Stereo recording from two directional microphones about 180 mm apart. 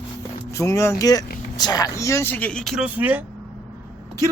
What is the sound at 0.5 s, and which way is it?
Speech, 15° left (ahead or behind).